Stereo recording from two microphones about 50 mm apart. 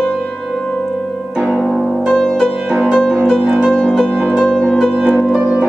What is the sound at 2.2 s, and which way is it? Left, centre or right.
Music, centre.